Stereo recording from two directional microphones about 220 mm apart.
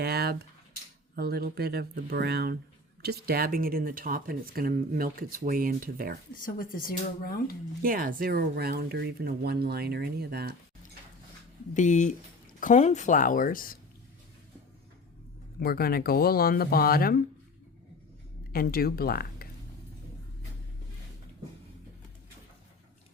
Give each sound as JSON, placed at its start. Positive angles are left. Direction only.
{"t": 0.0, "sound": "speech", "side_deg": -45}
{"t": 6.3, "sound": "a woman's voice", "side_deg": 40}
{"t": 7.8, "sound": "speech", "side_deg": -40}
{"t": 11.7, "sound": "a woman's voice", "side_deg": 35}
{"t": 15.6, "sound": "speech", "side_deg": 45}
{"t": 18.5, "sound": "speech", "side_deg": 40}